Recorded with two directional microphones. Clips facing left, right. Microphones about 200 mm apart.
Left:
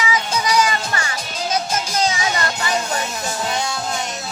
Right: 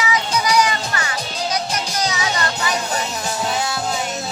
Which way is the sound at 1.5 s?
25° left (ahead or behind).